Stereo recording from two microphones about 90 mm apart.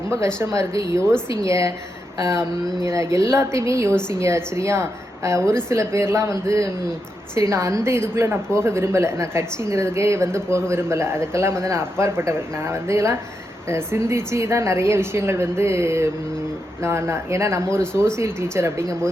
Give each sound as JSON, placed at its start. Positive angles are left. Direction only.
{"t": 0.1, "sound": "a woman's voice", "side_deg": -30}
{"t": 2.8, "sound": "a woman's voice", "side_deg": -35}